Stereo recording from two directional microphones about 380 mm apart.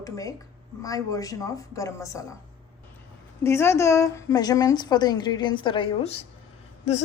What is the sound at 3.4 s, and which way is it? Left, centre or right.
A woman's voice, centre.